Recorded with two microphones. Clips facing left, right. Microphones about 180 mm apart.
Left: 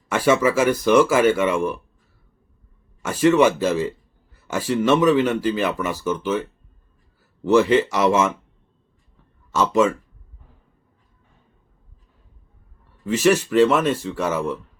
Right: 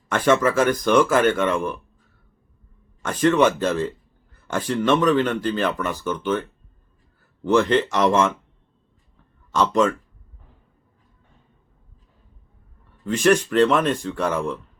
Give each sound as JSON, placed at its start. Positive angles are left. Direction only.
{"t": 0.1, "sound": "speech", "side_deg": 10}
{"t": 3.0, "sound": "speech", "side_deg": 10}
{"t": 9.5, "sound": "speech", "side_deg": 5}
{"t": 13.1, "sound": "speech", "side_deg": 5}